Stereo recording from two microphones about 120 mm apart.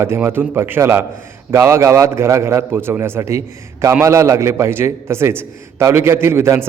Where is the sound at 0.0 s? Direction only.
20° right (ahead or behind).